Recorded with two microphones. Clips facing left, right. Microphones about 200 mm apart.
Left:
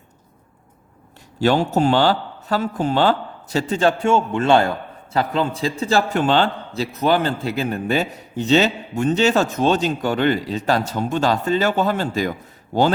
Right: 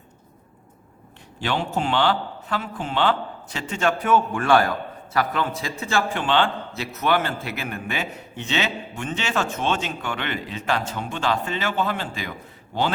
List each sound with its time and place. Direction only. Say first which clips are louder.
1.4 s a man's voice: left 8 dB; 40° left (ahead or behind)